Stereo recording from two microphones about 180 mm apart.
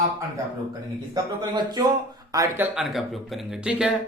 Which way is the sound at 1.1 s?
20° right (ahead or behind).